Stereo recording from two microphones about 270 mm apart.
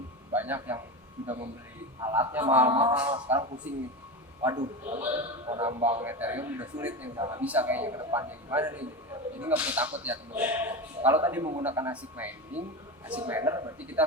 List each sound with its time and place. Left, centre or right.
0.3 s a man's voice: centre
2.0 s a man's voice: centre
6.0 s a man's voice: centre